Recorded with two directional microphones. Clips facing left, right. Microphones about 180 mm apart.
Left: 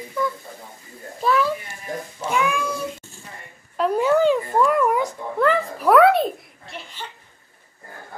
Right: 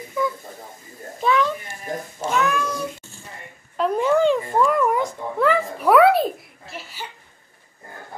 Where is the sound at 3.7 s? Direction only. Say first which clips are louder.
Even; 5° left (ahead or behind).